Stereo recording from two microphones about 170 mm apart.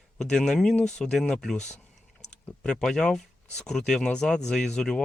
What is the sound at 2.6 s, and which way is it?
Speech, 5° left (ahead or behind).